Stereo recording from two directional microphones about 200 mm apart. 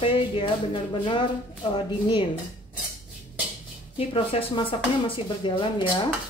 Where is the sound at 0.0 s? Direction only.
25° left (ahead or behind).